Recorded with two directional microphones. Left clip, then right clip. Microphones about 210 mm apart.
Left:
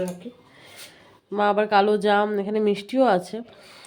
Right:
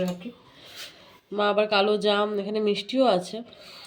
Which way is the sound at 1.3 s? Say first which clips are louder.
Left 3 dB; 15° left (ahead or behind).